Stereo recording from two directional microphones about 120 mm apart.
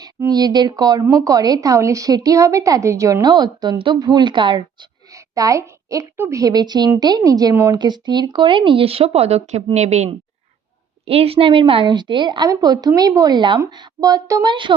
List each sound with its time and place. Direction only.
0.3 s a woman's voice: 35° right (ahead or behind)
5.1 s a woman's voice: 30° right (ahead or behind)
7.8 s a woman's voice: 35° right (ahead or behind); by 10.1 s 70° right (ahead or behind)
11.0 s a woman's voice: 55° right (ahead or behind); by 14.5 s 30° right (ahead or behind)